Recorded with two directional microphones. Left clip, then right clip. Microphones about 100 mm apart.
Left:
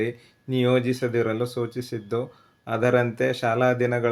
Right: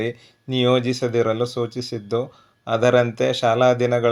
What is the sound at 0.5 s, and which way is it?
Speech, 20° right (ahead or behind).